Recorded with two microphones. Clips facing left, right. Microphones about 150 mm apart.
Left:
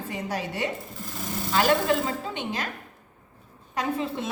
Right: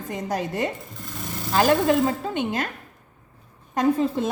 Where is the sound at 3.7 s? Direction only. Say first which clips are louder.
Right 7 dB; 45° right (ahead or behind).